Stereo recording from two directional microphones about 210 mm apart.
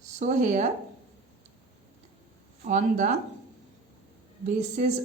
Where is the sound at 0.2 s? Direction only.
35° right (ahead or behind).